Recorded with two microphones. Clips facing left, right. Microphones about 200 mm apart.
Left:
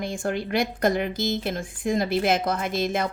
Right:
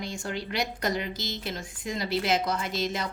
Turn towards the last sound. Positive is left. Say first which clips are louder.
# left 5 dB
turn(degrees=55)  # may be behind; listen again after turning